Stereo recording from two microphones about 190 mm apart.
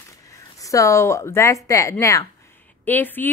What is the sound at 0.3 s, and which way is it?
A woman's voice, 15° left (ahead or behind).